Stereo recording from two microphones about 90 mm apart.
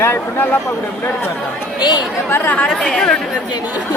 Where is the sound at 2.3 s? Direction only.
15° left (ahead or behind).